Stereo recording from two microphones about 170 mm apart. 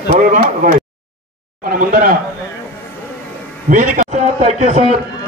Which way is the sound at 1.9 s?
55° right (ahead or behind).